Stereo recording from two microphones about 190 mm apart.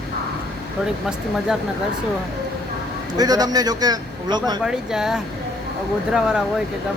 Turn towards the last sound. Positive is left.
turn(degrees=-5)  # may be behind; listen again after turning